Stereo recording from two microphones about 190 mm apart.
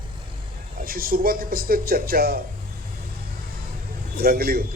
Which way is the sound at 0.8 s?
50° right (ahead or behind).